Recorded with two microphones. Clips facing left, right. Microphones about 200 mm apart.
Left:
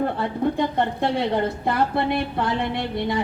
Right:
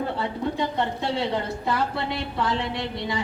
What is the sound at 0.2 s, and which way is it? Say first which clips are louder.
A woman's voice: left 4 dB; 55° left (ahead or behind).